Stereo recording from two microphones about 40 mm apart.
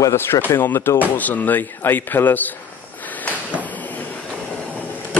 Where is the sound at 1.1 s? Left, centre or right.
Left.